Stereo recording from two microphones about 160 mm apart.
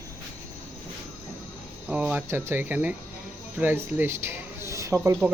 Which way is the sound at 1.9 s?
5° right (ahead or behind).